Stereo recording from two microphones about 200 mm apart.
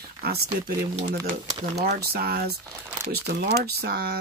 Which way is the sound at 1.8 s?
50° right (ahead or behind).